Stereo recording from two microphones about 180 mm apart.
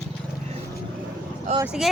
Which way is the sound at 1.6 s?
5° right (ahead or behind).